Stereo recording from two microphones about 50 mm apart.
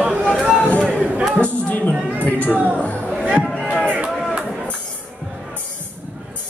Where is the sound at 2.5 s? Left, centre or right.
Right.